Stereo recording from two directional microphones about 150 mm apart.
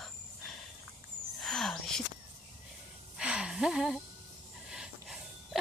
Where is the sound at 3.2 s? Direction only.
5° right (ahead or behind).